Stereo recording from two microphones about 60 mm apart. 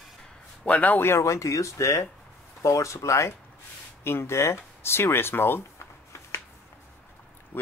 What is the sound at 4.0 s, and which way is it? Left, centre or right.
Speech, left.